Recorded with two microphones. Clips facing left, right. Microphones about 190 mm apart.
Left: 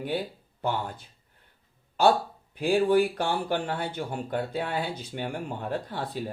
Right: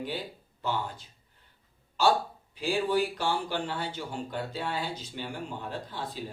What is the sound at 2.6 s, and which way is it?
Speech, 55° left (ahead or behind).